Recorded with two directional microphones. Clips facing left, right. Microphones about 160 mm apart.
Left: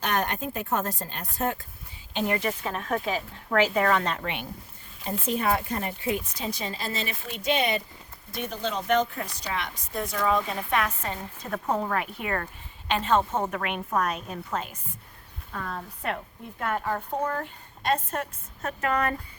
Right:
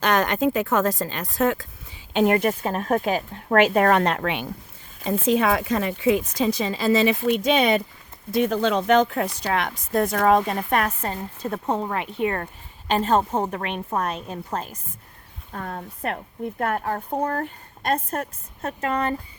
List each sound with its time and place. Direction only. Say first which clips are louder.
0.0 s a woman's voice: right 8 dB; 90° right
2.1 s a woman's voice: right 8 dB; 60° right (ahead or behind); by 4.4 s 80° right
5.2 s a woman's voice: right 5 dB; 90° right; by 11.2 s 45° right (ahead or behind)
11.5 s speech: right 1 dB; 25° right (ahead or behind)
12.9 s a woman's voice: right 4 dB; 40° right (ahead or behind)
18.8 s speech: right 2 dB; 30° right (ahead or behind)